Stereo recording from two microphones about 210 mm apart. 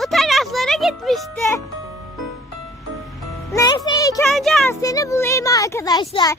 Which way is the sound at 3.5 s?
20° left (ahead or behind).